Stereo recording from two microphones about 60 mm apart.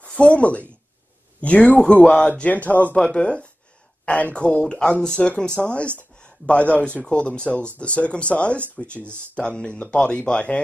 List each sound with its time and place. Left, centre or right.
0.0 s speech: centre